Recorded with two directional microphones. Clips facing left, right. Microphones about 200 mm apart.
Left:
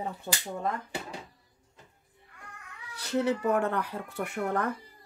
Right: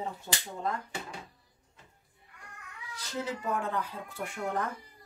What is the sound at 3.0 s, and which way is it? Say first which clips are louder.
Speech: left 8 dB; 65° left (ahead or behind).